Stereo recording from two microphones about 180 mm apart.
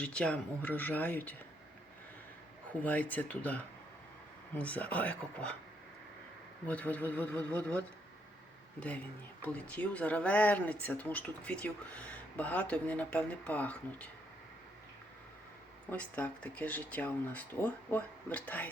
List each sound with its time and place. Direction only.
0.0 s speech: 5° left (ahead or behind)
2.8 s speech: 10° left (ahead or behind)
6.7 s speech: 10° left (ahead or behind)
9.4 s speech: 10° left (ahead or behind)
15.9 s speech: 10° left (ahead or behind)